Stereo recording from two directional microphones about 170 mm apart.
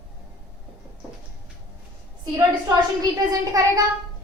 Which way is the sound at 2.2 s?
20° right (ahead or behind).